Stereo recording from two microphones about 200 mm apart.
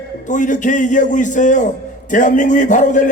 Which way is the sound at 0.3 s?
40° left (ahead or behind).